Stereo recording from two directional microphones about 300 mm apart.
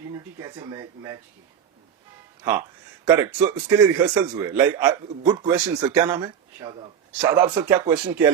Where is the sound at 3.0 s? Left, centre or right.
Centre.